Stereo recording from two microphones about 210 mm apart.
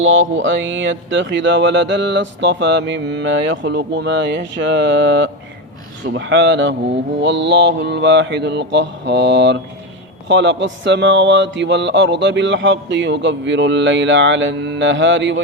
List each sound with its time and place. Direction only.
0.0 s speech: 70° right (ahead or behind)